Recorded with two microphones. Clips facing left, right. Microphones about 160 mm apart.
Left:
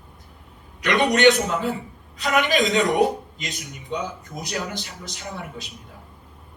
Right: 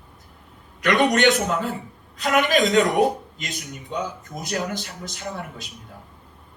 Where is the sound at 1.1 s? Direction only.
40° right (ahead or behind).